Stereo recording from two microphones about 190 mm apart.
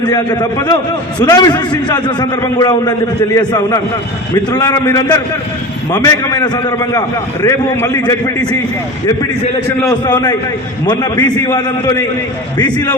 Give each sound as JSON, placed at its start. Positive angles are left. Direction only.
{"t": 0.0, "sound": "a man's voice", "side_deg": 20}
{"t": 10.1, "sound": "a man's voice", "side_deg": 20}